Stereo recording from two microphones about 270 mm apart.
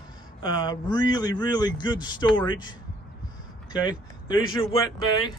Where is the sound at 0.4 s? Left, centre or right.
Centre.